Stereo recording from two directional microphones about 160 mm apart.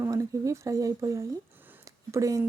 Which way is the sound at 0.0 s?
20° right (ahead or behind).